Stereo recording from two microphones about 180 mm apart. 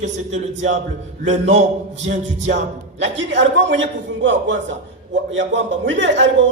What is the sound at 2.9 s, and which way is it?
A man's voice, 85° right.